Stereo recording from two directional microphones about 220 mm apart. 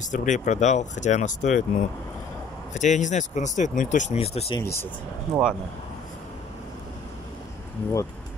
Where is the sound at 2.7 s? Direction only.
35° left (ahead or behind).